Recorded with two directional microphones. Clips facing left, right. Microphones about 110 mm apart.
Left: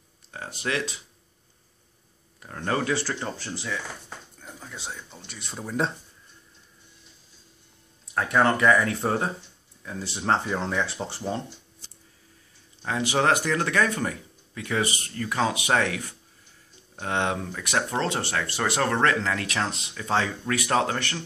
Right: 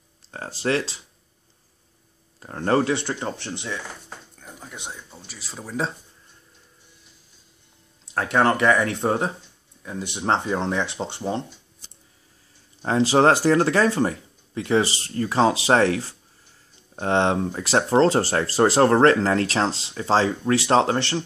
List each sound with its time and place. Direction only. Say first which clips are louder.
0.3 s speech: right 6 dB; 35° right (ahead or behind)
2.4 s speech: right 6 dB; 35° right (ahead or behind); by 5.2 s 15° right (ahead or behind)
5.2 s speech: left 3 dB; 5° right (ahead or behind)
8.0 s speech: right 2 dB; 30° right (ahead or behind)
12.8 s speech: right 6 dB; 35° right (ahead or behind)